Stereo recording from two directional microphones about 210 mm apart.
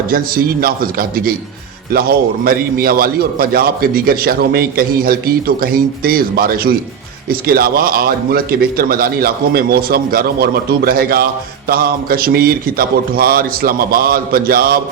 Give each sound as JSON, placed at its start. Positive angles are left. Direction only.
{"t": 0.1, "sound": "a man's voice", "side_deg": -45}